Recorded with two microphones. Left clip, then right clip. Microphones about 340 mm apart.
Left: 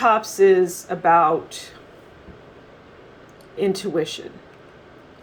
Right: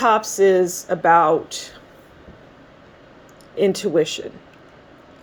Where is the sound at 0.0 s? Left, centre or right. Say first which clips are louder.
Even; right.